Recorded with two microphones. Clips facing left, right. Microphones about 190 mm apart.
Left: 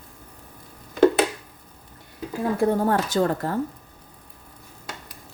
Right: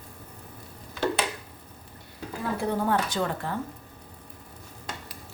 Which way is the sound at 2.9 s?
45° left (ahead or behind).